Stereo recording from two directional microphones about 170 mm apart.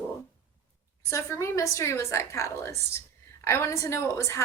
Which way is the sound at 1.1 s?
15° left (ahead or behind).